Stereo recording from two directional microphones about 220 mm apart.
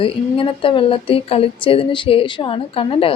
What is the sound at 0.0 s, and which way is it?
A woman's voice, 25° left (ahead or behind).